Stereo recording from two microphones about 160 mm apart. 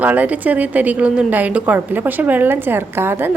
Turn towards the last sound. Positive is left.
turn(degrees=-15)  # may be behind; listen again after turning